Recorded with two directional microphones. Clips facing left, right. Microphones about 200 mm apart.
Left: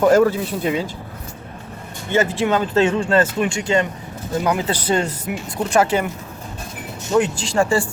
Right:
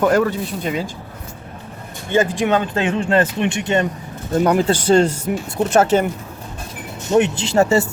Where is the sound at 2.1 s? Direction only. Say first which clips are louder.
Right 1 dB; 15° right (ahead or behind).